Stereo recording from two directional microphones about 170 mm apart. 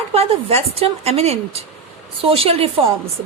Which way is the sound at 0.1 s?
35° right (ahead or behind).